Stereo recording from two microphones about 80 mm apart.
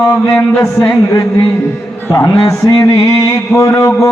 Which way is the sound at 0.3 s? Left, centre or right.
Left.